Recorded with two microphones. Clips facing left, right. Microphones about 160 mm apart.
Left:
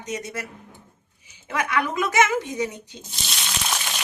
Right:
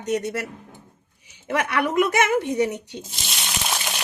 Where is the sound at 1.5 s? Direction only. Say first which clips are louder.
Right 4 dB; 65° right (ahead or behind).